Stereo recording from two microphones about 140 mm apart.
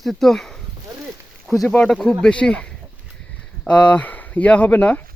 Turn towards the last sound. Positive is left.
turn(degrees=10)  # may be behind; listen again after turning